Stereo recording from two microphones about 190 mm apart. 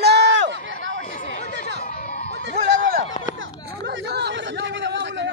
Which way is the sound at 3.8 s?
60° right (ahead or behind).